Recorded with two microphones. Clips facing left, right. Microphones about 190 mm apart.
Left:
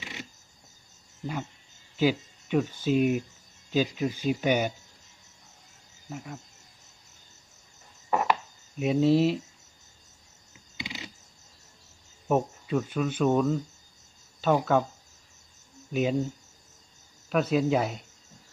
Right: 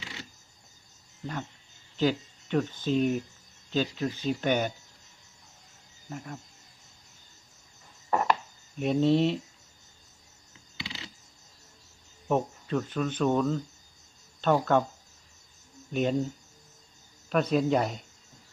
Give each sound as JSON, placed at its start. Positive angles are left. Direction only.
{"t": 0.0, "sound": "a sound", "side_deg": 20}
{"t": 2.0, "sound": "speech", "side_deg": 10}
{"t": 6.1, "sound": "speech", "side_deg": 5}
{"t": 8.1, "sound": "a sound", "side_deg": 5}
{"t": 8.8, "sound": "speech", "side_deg": 5}
{"t": 10.8, "sound": "a sound", "side_deg": 20}
{"t": 12.3, "sound": "speech", "side_deg": 10}
{"t": 15.9, "sound": "speech", "side_deg": 5}
{"t": 17.2, "sound": "speech", "side_deg": 5}